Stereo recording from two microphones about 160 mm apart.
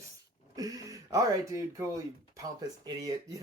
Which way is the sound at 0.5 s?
20° right (ahead or behind).